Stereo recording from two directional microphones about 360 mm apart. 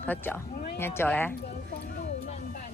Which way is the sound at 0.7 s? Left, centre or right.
Centre.